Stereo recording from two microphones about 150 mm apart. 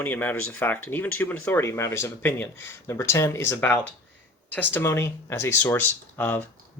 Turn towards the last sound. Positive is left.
turn(degrees=15)  # may be behind; listen again after turning